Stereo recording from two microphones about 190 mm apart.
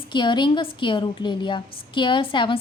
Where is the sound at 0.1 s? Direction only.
25° left (ahead or behind).